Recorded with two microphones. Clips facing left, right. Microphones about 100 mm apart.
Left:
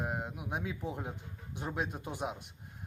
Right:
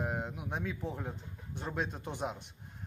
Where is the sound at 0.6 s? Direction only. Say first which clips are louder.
Even; 15° left (ahead or behind).